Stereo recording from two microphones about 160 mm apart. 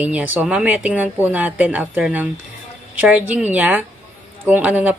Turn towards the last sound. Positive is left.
turn(degrees=-10)  # may be behind; listen again after turning